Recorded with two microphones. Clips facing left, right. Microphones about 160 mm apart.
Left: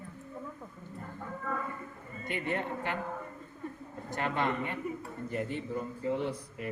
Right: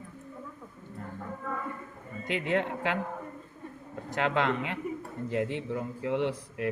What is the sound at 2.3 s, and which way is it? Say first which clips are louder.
Speech: right 5 dB; 90° right.